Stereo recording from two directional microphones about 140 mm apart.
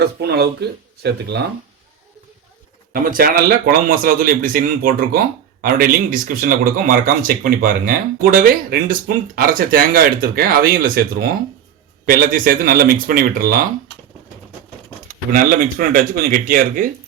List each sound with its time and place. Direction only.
2.9 s speech: 90° right
15.3 s speech: 80° right